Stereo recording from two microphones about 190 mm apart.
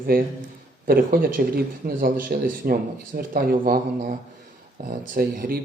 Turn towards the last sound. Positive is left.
turn(degrees=-50)  # may be behind; listen again after turning